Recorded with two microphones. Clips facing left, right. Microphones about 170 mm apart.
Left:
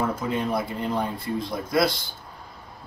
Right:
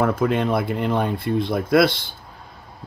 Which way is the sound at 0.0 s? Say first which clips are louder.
Right 6 dB; 65° right (ahead or behind).